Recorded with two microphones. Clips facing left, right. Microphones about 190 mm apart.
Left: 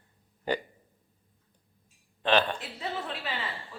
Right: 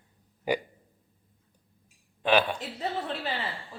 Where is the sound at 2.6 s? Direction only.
35° right (ahead or behind).